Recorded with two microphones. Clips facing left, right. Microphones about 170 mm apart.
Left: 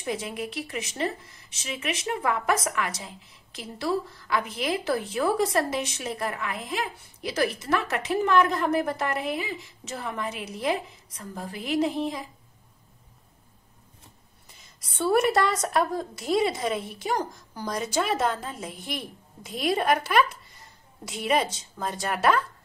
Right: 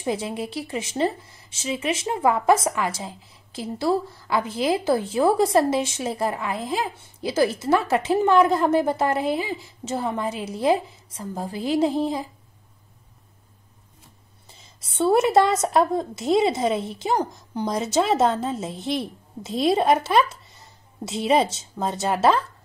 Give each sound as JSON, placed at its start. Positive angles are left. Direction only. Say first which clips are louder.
{"t": 0.0, "sound": "speech", "louder": "right 5 dB", "side_deg": -30}
{"t": 14.8, "sound": "speech", "louder": "right 4 dB", "side_deg": -25}